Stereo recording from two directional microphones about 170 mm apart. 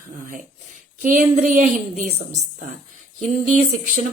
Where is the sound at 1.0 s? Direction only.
45° right (ahead or behind).